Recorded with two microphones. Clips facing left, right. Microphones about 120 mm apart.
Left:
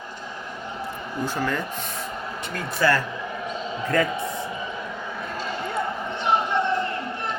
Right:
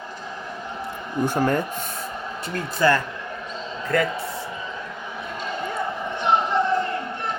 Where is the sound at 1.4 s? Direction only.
40° right (ahead or behind).